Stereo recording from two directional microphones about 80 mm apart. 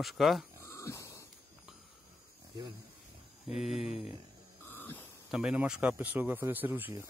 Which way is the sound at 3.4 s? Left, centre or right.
Centre.